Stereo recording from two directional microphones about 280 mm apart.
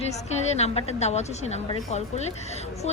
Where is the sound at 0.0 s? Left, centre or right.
Left.